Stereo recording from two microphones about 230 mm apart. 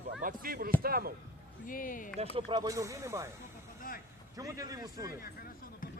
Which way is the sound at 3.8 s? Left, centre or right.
Left.